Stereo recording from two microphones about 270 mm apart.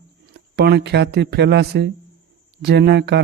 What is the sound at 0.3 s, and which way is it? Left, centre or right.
Speech, right.